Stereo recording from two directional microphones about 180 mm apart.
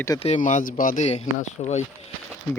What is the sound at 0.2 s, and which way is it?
Speech, 40° left (ahead or behind).